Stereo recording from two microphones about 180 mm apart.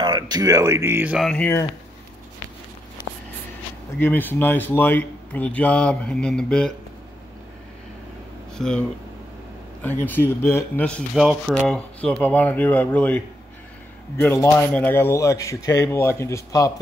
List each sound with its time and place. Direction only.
0.0 s speech: 20° right (ahead or behind)
1.2 s speech: 10° left (ahead or behind)
4.0 s speech: 10° left (ahead or behind)
8.5 s speech: 5° left (ahead or behind)
10.0 s speech: 10° left (ahead or behind)